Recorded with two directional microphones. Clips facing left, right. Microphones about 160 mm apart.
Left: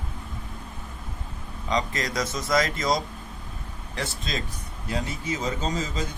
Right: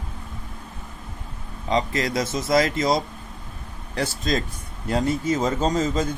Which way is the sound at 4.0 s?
45° right (ahead or behind).